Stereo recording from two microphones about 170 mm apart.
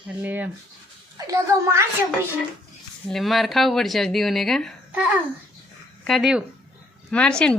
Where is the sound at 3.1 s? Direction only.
Centre (ahead or behind).